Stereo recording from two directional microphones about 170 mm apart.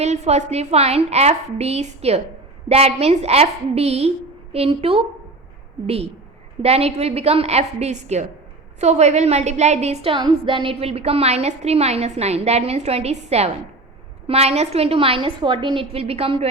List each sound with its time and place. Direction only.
0.0 s a woman's voice: 40° right (ahead or behind)